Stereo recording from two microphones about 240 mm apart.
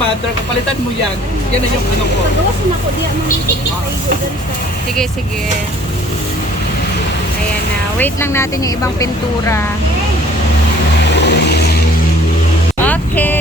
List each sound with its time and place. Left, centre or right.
7.9 s a woman's voice: centre
11.2 s vehicle: left
12.8 s a sound: centre